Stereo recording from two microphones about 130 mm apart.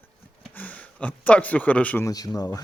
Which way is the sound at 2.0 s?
25° left (ahead or behind).